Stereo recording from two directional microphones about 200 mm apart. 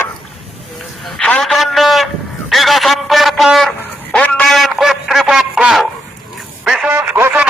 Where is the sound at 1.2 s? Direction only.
5° left (ahead or behind).